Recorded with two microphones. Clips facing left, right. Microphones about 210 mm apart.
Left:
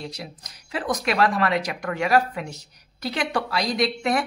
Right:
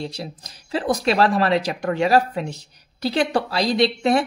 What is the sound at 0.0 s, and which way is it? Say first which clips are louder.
Speech: right 5 dB; 30° right (ahead or behind).